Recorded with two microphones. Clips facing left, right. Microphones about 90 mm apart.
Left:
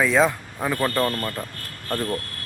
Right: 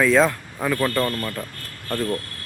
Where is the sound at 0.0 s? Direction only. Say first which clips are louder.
Right 2 dB; 5° left (ahead or behind).